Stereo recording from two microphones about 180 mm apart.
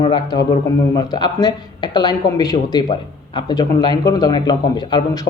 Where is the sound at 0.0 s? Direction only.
25° left (ahead or behind).